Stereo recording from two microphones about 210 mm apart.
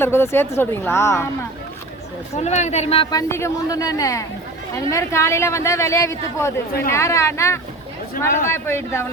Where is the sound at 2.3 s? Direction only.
30° left (ahead or behind).